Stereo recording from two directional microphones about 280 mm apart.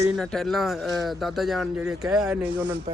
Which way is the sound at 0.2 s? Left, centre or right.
Centre.